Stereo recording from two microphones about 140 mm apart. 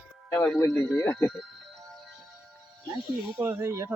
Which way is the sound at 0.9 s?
20° left (ahead or behind).